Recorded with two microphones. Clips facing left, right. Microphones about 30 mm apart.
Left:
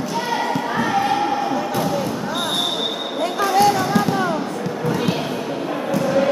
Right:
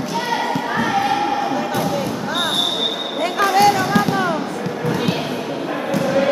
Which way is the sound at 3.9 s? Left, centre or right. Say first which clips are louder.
Right 1 dB; right.